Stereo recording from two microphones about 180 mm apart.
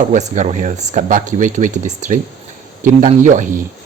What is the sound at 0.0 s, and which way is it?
Speech, 40° right (ahead or behind).